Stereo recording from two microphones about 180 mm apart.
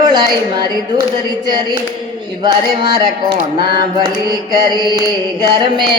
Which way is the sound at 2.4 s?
25° right (ahead or behind).